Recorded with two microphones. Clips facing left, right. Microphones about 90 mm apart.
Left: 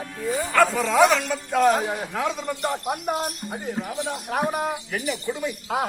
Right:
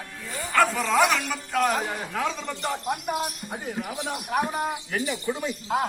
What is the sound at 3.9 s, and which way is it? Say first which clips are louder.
Speech: left 2 dB; 15° right (ahead or behind).